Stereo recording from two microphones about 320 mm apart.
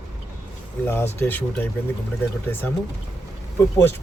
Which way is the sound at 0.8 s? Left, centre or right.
Centre.